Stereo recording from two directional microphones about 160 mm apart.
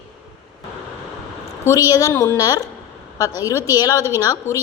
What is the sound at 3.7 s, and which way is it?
Speech, 20° left (ahead or behind).